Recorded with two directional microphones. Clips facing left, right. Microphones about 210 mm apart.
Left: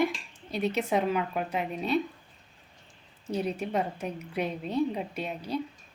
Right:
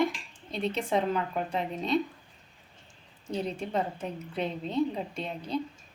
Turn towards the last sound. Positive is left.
turn(degrees=10)  # may be behind; listen again after turning